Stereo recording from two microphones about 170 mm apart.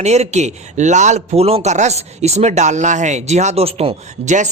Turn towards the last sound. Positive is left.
turn(degrees=-45)  # may be behind; listen again after turning